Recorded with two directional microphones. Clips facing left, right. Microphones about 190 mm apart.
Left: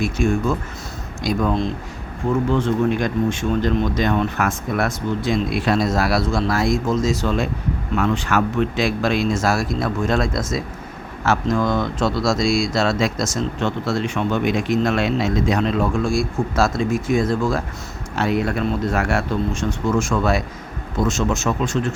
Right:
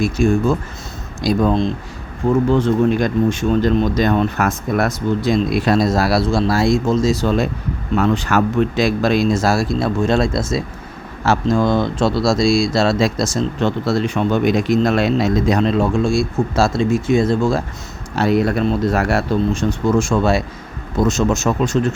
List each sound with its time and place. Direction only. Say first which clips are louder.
0.0 s speech: right 4 dB; 35° right (ahead or behind)
18.2 s speech: right 4 dB; 35° right (ahead or behind)